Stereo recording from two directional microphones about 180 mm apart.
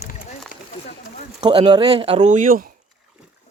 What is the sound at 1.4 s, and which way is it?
Speech, 25° right (ahead or behind).